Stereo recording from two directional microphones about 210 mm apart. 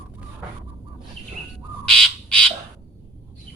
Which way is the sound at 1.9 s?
5° left (ahead or behind).